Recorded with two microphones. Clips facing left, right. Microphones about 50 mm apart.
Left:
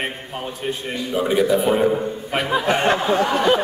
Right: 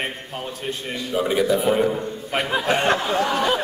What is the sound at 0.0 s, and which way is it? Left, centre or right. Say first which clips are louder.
A man's voice: left 2 dB; centre.